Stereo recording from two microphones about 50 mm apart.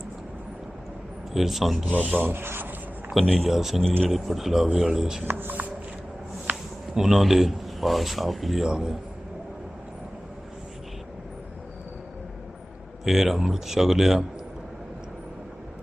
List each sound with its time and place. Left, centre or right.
1.3 s speech: centre
1.9 s speech: right
3.3 s speech: centre
5.2 s speech: right
6.9 s speech: centre
13.1 s speech: centre